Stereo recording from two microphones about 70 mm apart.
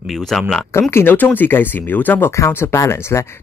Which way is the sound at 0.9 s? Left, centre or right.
Left.